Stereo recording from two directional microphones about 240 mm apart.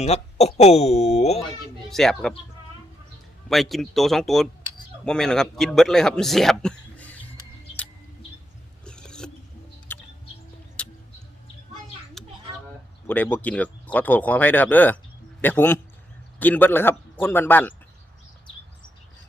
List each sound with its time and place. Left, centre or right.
0.0 s speech: left
1.9 s a man's voice: centre
3.5 s a man's voice: centre
8.8 s mechanisms: centre
9.9 s bird: centre
10.8 s tick-tock: centre
13.1 s speech: centre